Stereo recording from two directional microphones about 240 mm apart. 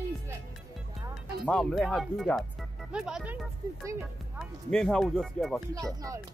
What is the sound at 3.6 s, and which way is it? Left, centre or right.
Speech, centre.